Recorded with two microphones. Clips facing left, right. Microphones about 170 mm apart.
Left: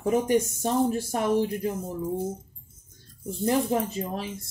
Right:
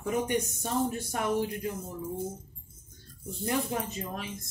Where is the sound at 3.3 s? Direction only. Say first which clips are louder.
Left 7 dB; 30° left (ahead or behind).